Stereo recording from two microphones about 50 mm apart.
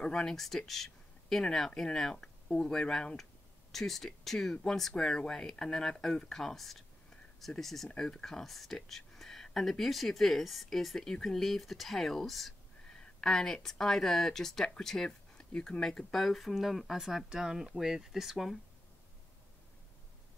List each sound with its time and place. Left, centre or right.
0.0 s speech: centre
15.0 s a sound: centre
15.8 s speech: centre